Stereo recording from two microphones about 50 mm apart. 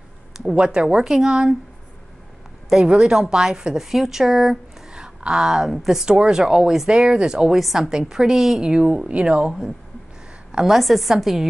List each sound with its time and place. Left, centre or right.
0.5 s a woman's voice: centre
2.8 s a woman's voice: right
6.0 s a woman's voice: centre
7.5 s a woman's voice: centre
10.7 s a woman's voice: centre